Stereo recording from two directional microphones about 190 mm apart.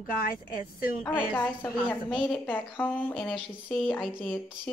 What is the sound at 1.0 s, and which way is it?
A woman's voice, 10° left (ahead or behind).